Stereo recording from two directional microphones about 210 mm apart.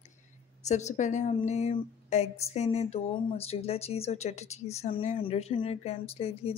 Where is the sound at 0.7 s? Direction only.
35° left (ahead or behind).